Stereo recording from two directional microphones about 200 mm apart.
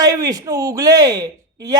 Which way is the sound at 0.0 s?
20° right (ahead or behind).